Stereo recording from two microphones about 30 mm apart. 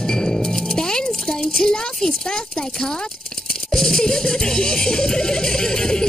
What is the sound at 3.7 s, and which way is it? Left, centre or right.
Music, centre.